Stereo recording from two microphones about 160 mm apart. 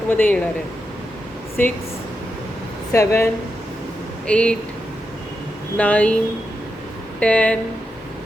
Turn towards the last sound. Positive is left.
turn(degrees=10)  # may be behind; listen again after turning